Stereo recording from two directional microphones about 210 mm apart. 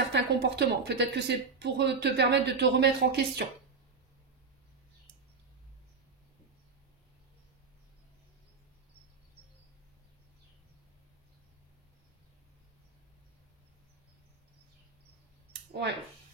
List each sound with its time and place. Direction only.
0.1 s a woman's voice: 55° right (ahead or behind)
15.7 s speech: 55° right (ahead or behind)